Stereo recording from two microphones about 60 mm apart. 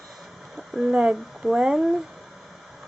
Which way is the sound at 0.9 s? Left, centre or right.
Centre.